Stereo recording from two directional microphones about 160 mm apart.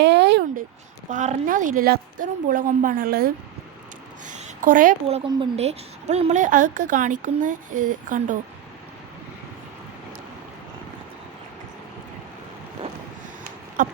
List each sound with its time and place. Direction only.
0.0 s a sound: 90° right
1.1 s a woman's voice: 50° right (ahead or behind); by 3.3 s 70° right (ahead or behind)
4.3 s a woman's voice: 50° right (ahead or behind)
5.0 s a woman's voice: 35° right (ahead or behind); by 8.4 s 55° right (ahead or behind)
13.8 s a woman's voice: 55° right (ahead or behind)